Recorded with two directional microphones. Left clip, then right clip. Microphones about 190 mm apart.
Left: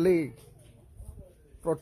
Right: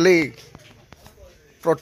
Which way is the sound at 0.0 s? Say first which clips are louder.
Right 9 dB; centre (ahead or behind).